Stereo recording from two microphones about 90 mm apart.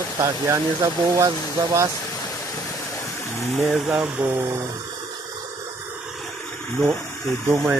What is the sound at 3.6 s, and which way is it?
Speech, 5° right (ahead or behind).